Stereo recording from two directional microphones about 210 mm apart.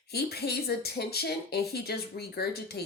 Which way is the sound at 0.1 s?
50° left (ahead or behind).